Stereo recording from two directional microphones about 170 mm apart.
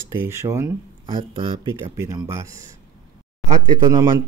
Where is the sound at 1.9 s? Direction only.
20° right (ahead or behind).